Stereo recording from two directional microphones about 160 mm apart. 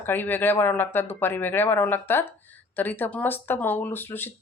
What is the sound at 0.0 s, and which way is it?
Speech, 10° left (ahead or behind).